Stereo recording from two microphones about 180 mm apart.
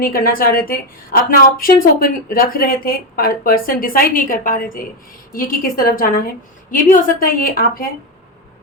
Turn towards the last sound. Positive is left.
turn(degrees=50)  # may be behind; listen again after turning